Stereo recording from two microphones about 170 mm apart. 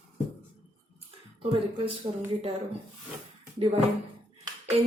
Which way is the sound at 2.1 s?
35° right (ahead or behind).